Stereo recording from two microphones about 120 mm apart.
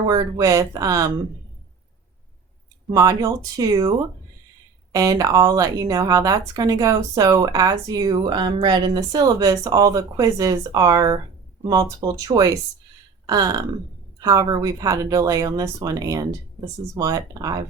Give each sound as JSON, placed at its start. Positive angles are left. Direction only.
{"t": 0.1, "sound": "speech", "side_deg": -30}
{"t": 2.9, "sound": "speech", "side_deg": -30}